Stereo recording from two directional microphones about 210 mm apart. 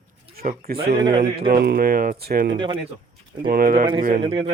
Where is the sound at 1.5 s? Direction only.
45° right (ahead or behind).